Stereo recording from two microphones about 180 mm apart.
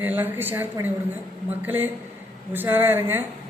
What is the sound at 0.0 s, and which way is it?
A woman's voice, 10° right (ahead or behind).